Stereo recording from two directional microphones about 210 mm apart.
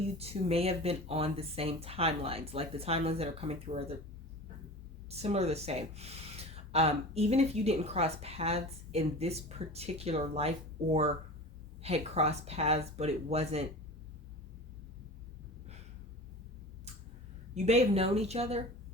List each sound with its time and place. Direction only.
0.2 s speech: 30° right (ahead or behind)
5.0 s speech: 30° right (ahead or behind)
11.8 s speech: 30° right (ahead or behind)
17.5 s speech: 30° right (ahead or behind)